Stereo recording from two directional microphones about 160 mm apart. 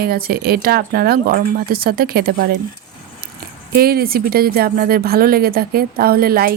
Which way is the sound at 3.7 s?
70° right (ahead or behind).